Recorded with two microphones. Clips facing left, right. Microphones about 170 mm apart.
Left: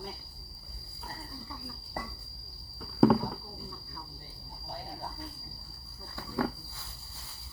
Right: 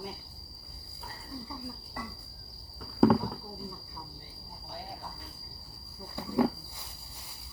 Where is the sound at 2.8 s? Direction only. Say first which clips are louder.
Even; centre (ahead or behind).